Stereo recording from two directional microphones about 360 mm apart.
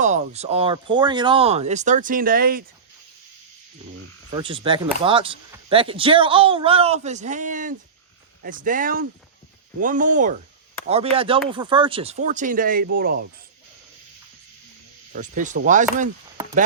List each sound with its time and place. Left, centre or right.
0.0 s speech: centre
4.3 s speech: centre
15.1 s speech: right